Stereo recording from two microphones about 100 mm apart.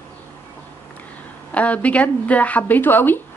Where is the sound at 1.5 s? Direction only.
15° left (ahead or behind).